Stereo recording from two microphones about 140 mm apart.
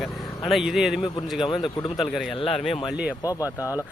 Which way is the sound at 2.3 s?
45° left (ahead or behind).